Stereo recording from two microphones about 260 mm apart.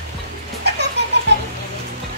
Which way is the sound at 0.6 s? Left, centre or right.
Right.